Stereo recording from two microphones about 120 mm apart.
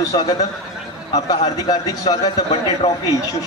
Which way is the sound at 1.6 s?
30° left (ahead or behind).